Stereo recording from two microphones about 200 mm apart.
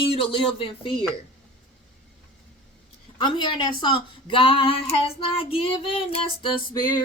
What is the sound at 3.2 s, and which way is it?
Speech, 25° left (ahead or behind).